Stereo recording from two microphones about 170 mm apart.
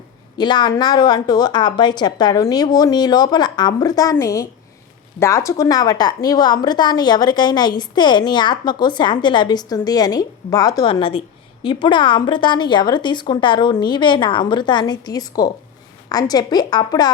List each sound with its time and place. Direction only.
0.3 s a woman's voice: 25° left (ahead or behind)